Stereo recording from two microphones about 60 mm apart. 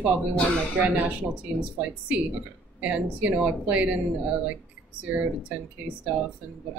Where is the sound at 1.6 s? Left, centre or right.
Right.